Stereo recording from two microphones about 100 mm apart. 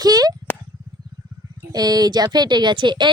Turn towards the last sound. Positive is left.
turn(degrees=-50)  # may be behind; listen again after turning